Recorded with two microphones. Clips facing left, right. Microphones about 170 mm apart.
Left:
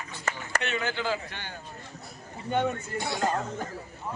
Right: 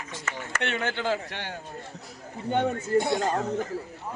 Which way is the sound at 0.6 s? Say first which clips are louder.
Right 3 dB; 60° right (ahead or behind).